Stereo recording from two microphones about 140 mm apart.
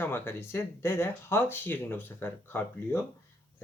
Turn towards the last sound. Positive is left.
turn(degrees=15)  # may be behind; listen again after turning